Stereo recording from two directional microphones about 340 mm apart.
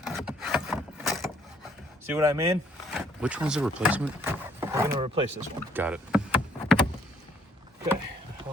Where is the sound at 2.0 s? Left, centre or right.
Centre.